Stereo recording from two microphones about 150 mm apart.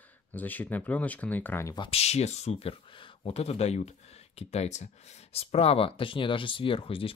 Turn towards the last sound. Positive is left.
turn(degrees=35)  # may be behind; listen again after turning